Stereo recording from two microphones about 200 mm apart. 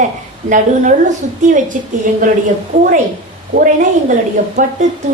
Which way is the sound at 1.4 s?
40° right (ahead or behind).